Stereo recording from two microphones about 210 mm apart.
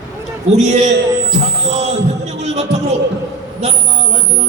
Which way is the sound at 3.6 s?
35° right (ahead or behind).